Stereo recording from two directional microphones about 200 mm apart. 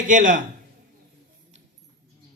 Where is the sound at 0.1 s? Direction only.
40° right (ahead or behind).